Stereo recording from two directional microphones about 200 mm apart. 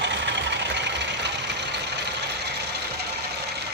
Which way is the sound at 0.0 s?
65° right (ahead or behind).